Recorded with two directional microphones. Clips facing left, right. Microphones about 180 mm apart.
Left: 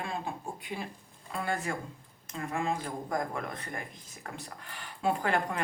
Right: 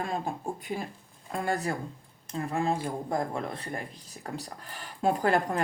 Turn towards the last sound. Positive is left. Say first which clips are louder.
# right 4 dB
turn(degrees=-40)  # may be behind; listen again after turning